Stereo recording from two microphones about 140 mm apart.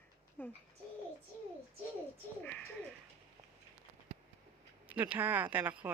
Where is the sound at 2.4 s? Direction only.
10° left (ahead or behind).